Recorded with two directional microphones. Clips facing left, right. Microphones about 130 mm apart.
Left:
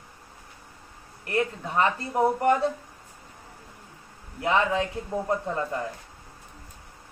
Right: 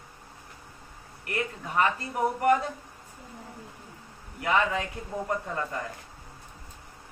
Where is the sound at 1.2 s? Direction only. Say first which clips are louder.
Left 6 dB; 30° left (ahead or behind).